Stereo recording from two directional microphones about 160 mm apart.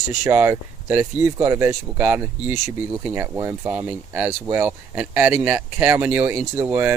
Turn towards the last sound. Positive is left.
turn(degrees=-15)  # may be behind; listen again after turning